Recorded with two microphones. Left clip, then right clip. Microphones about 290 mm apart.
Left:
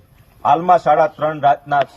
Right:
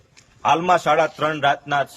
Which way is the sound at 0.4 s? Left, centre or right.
Centre.